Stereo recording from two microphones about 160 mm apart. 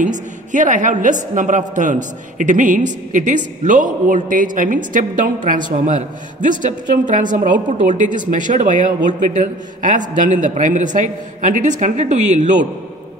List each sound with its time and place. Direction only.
0.0 s a woman's voice: 50° right (ahead or behind)